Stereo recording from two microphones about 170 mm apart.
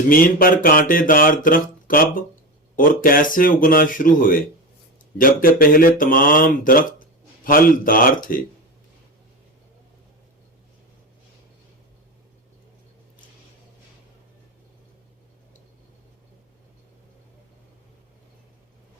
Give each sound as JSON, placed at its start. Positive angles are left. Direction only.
{"t": 0.1, "sound": "speech", "side_deg": 55}